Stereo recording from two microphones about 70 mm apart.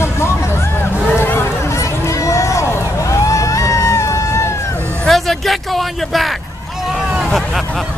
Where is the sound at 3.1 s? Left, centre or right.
Left.